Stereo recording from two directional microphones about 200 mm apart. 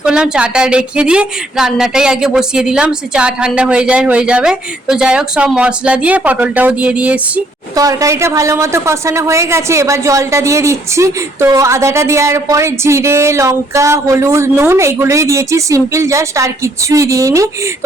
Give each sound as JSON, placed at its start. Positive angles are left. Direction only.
{"t": 0.0, "sound": "a woman's voice", "side_deg": -5}